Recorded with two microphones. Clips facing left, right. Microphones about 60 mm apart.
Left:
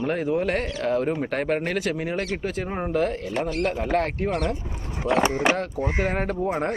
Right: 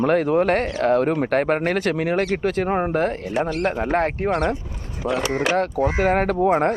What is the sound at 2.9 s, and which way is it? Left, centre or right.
Speech, right.